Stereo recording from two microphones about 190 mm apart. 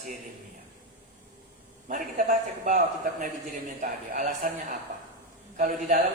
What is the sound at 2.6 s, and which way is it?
A man's voice, 40° right (ahead or behind).